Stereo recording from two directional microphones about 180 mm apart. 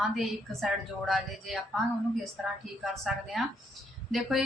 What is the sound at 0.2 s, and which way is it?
A woman's voice, centre (ahead or behind).